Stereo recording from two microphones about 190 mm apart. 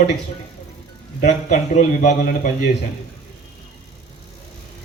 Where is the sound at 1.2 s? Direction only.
40° left (ahead or behind).